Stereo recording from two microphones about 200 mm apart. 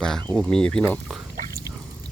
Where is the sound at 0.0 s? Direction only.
5° left (ahead or behind).